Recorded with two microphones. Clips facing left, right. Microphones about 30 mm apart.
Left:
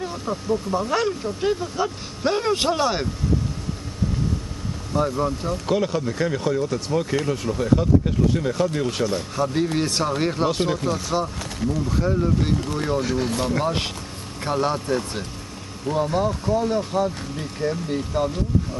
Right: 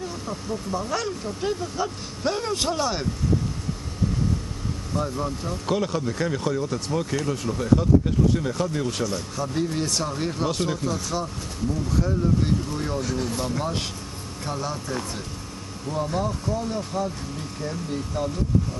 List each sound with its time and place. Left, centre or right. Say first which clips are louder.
0.0 s speech: left 4 dB; centre
5.1 s speech: left 5 dB; centre; by 15.0 s left
15.9 s speech: left 5 dB; left